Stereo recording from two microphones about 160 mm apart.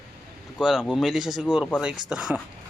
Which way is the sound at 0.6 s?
5° right (ahead or behind).